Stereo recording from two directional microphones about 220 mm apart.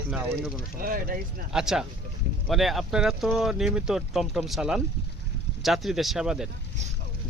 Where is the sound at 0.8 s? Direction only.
40° right (ahead or behind).